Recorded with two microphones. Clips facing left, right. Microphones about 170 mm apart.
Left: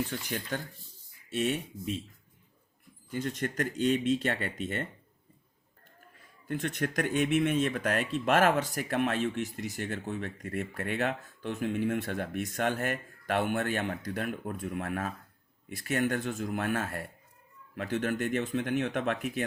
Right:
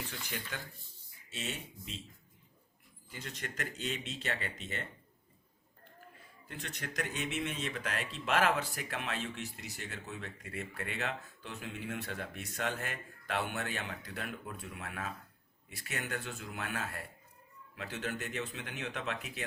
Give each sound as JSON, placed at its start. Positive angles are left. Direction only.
{"t": 0.1, "sound": "speech", "side_deg": 45}
{"t": 1.3, "sound": "speech", "side_deg": 55}
{"t": 3.1, "sound": "speech", "side_deg": 50}
{"t": 6.5, "sound": "speech", "side_deg": 55}